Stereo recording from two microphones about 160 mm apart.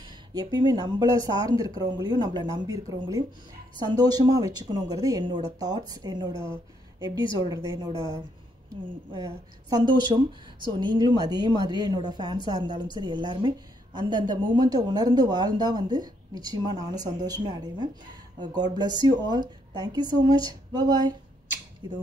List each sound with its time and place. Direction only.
0.0 s a woman's voice: 25° right (ahead or behind)